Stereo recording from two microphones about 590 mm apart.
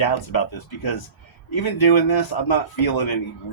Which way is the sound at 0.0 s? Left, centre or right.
Left.